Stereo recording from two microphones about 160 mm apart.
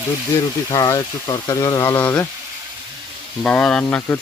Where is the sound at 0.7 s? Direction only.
25° left (ahead or behind).